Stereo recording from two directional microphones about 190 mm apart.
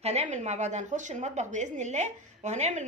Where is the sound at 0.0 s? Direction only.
35° right (ahead or behind).